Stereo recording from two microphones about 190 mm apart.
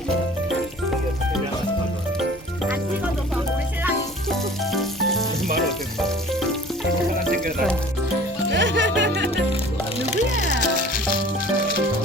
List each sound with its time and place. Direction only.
4.3 s music: centre (ahead or behind)
8.5 s music: 70° right (ahead or behind)
10.1 s music: 40° left (ahead or behind)